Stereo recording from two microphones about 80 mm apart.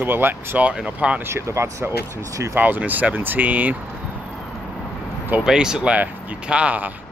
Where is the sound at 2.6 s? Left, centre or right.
Right.